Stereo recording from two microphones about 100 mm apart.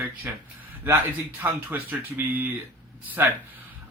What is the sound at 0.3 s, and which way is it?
A man's voice, 20° right (ahead or behind).